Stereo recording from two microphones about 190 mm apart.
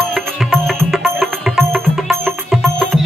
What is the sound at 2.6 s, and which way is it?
Music, centre (ahead or behind).